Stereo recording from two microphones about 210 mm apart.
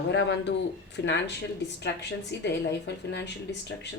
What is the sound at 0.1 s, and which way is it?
Speech, 55° left (ahead or behind).